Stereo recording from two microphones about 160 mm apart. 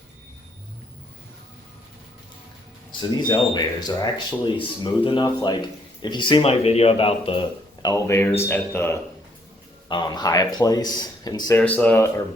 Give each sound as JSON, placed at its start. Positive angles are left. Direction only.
{"t": 3.1, "sound": "a man's voice", "side_deg": 25}
{"t": 7.8, "sound": "speech", "side_deg": 20}
{"t": 9.9, "sound": "speech", "side_deg": 25}
{"t": 11.6, "sound": "speech", "side_deg": 10}